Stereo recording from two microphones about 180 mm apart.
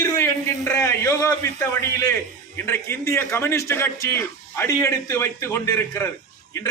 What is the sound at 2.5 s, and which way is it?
A man's voice, 10° left (ahead or behind).